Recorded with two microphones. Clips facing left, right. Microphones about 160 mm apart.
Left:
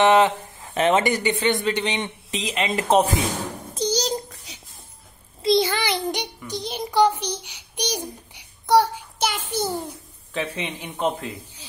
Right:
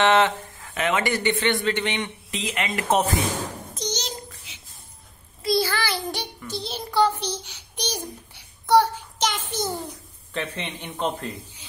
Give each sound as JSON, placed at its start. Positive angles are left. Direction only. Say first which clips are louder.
{"t": 0.0, "sound": "speech", "louder": "left 3 dB", "side_deg": 20}
{"t": 0.7, "sound": "speech", "louder": "left 5 dB", "side_deg": 30}
{"t": 1.0, "sound": "a man's voice", "louder": "left 2 dB", "side_deg": 15}
{"t": 3.7, "sound": "a sound", "louder": "left 10 dB", "side_deg": 35}
{"t": 5.4, "sound": "a child's voice", "louder": "left 3 dB", "side_deg": 20}